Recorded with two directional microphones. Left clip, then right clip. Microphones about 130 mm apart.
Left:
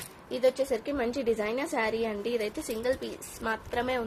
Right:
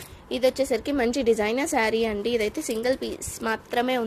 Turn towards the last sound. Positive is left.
turn(degrees=-55)  # may be behind; listen again after turning